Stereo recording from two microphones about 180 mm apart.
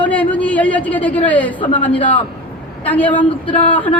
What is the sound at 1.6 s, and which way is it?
Speech, 30° left (ahead or behind).